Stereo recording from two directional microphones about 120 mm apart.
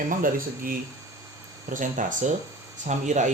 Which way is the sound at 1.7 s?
90° right.